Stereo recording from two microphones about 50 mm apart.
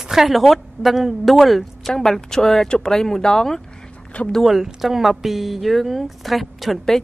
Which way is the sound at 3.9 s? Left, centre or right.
Left.